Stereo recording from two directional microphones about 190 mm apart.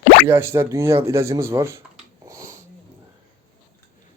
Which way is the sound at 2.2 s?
15° right (ahead or behind).